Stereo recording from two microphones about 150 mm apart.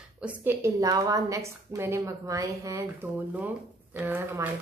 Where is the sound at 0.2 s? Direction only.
10° right (ahead or behind).